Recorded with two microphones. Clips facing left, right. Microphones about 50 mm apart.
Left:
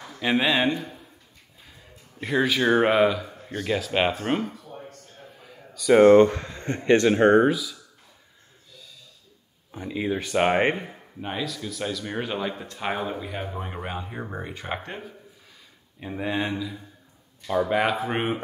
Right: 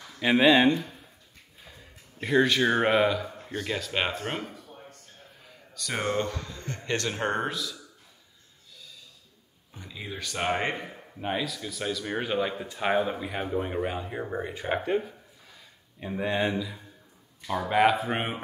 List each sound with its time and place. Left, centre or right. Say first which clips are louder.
0.2 s speech: right 2 dB; centre
5.4 s a sound: right 2 dB; centre
6.0 s speech: left 13 dB; left
7.4 s speech: left 9 dB; centre
9.7 s speech: left 12 dB; left
10.9 s speech: right 2 dB; centre
14.5 s speech: right 6 dB; centre